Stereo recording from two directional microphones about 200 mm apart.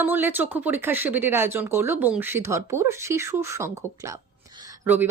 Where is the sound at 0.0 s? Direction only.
10° right (ahead or behind).